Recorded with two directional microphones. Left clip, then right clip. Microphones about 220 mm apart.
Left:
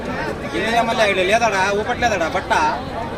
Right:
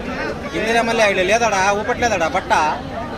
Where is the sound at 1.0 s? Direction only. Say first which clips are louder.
Right 1 dB; 50° right (ahead or behind).